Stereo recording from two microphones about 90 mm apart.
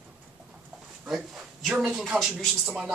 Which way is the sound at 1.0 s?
5° right (ahead or behind).